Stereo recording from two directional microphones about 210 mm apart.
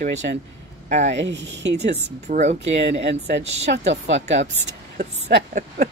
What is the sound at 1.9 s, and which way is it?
Speech, 35° right (ahead or behind).